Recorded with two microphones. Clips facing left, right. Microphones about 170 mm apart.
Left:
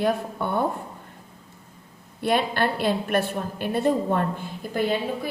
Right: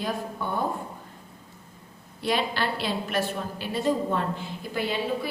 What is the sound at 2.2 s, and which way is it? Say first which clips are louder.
A woman's voice: left 4 dB; 55° left (ahead or behind).